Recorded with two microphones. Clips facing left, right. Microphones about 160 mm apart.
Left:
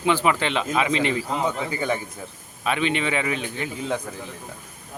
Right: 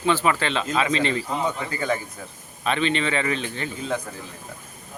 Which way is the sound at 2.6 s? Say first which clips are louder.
Even; 10° left (ahead or behind).